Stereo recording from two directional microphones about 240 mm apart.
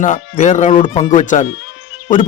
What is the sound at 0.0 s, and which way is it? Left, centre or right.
Speech, left.